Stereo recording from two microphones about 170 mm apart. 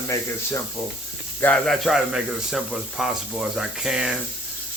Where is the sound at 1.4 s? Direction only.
10° left (ahead or behind).